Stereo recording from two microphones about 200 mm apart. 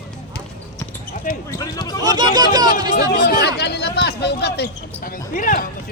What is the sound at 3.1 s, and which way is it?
Speech, 60° left (ahead or behind).